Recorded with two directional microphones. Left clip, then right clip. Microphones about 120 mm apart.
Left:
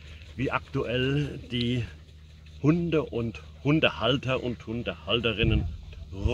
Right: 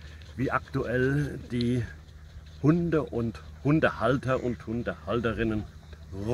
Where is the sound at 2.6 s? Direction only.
20° left (ahead or behind).